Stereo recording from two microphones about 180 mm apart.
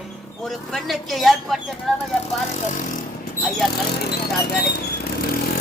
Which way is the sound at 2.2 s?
45° left (ahead or behind).